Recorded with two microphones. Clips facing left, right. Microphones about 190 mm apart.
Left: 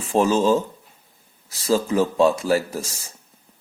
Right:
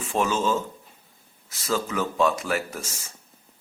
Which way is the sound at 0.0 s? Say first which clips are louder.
Left 6 dB; 35° left (ahead or behind).